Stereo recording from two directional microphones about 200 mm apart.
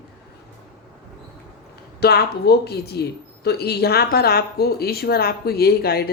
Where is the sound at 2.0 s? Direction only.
50° left (ahead or behind).